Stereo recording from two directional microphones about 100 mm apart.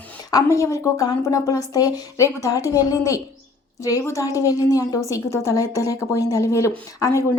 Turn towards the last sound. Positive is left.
turn(degrees=30)  # may be behind; listen again after turning